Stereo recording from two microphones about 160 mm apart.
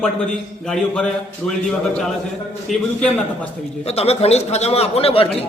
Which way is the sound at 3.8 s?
40° left (ahead or behind).